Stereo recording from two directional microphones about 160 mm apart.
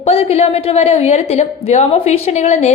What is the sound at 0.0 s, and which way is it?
A woman's voice, 40° left (ahead or behind).